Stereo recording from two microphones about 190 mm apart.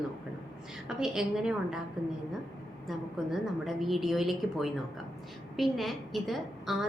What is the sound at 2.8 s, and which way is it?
A woman's voice, centre (ahead or behind).